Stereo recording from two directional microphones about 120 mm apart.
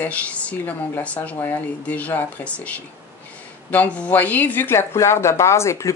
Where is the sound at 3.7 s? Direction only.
10° left (ahead or behind).